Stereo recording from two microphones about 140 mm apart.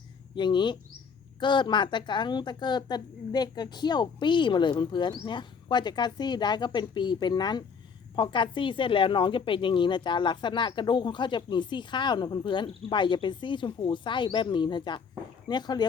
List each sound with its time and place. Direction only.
0.3 s speech: 35° left (ahead or behind)